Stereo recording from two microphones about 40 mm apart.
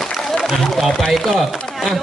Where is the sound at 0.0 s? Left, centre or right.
Centre.